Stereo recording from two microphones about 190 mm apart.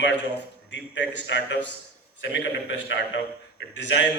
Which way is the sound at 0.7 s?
70° left (ahead or behind).